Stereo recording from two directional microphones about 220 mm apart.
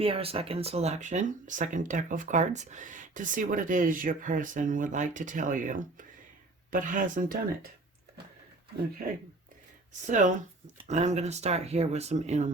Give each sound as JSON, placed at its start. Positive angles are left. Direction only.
{"t": 0.0, "sound": "speech", "side_deg": -25}
{"t": 10.0, "sound": "speech", "side_deg": -35}